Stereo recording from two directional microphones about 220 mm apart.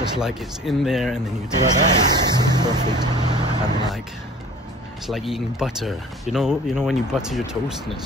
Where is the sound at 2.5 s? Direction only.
20° right (ahead or behind).